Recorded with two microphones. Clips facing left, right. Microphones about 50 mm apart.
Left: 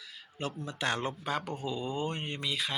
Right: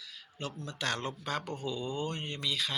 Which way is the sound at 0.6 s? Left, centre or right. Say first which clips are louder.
Left 2 dB; centre.